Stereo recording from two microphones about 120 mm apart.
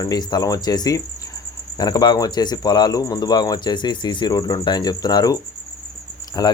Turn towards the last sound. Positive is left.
turn(degrees=30)  # may be behind; listen again after turning